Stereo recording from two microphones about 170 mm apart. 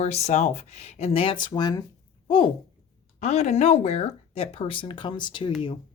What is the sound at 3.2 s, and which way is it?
Speech, 40° left (ahead or behind).